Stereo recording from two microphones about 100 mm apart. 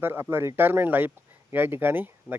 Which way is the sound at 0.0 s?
20° right (ahead or behind).